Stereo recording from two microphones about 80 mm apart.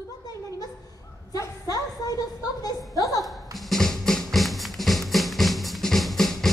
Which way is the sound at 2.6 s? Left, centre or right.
Left.